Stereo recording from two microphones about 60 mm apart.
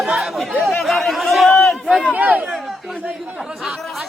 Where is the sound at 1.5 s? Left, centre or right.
Centre.